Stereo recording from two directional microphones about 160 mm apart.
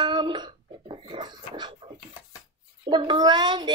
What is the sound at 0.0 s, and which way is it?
Music, 25° right (ahead or behind).